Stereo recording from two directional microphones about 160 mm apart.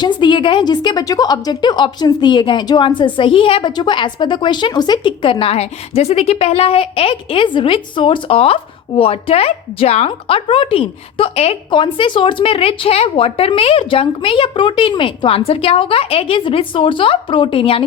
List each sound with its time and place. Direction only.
0.0 s a woman's voice: 30° left (ahead or behind)